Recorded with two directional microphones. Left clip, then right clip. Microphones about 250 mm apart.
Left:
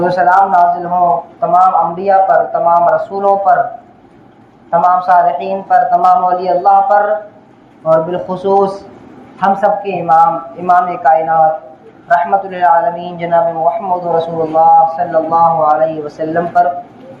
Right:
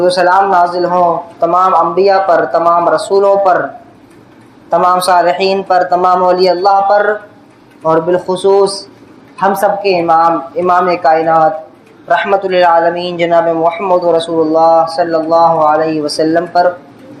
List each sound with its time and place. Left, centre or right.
0.0 s speech: right
4.9 s speech: right
7.9 s speech: right